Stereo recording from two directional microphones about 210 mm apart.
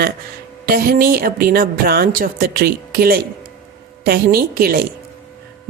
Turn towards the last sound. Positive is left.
turn(degrees=-45)  # may be behind; listen again after turning